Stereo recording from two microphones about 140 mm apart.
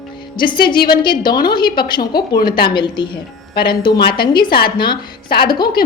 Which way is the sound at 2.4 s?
90° left.